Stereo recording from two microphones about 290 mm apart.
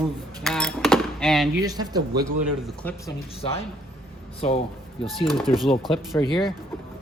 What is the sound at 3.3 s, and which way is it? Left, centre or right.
Speech, centre.